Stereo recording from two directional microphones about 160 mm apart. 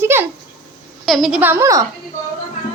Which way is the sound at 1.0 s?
Centre (ahead or behind).